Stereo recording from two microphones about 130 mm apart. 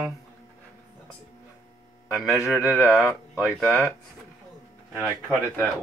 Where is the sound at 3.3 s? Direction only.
Centre (ahead or behind).